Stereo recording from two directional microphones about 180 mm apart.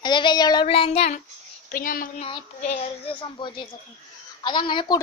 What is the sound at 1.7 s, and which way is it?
Speech, 50° left (ahead or behind).